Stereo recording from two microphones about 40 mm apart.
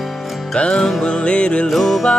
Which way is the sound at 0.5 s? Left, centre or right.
Left.